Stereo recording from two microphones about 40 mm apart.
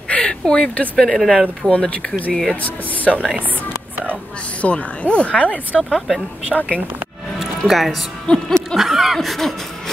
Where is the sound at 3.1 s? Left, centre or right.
Centre.